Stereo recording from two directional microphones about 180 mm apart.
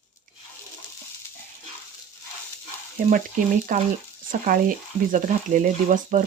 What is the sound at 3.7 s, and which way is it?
Speech, 50° right (ahead or behind).